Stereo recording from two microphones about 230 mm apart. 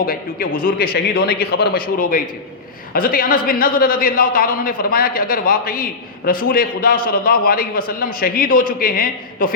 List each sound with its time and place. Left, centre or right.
0.0 s a man's voice: left